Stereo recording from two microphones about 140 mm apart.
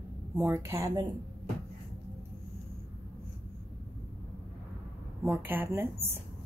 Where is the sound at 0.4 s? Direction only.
20° right (ahead or behind).